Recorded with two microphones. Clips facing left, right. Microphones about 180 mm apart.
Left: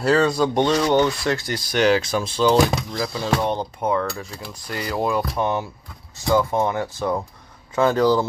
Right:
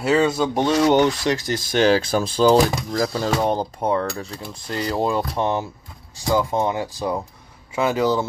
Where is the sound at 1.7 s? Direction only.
30° right (ahead or behind).